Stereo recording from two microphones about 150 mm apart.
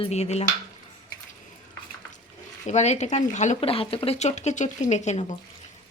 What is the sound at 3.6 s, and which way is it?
Speech, 40° left (ahead or behind).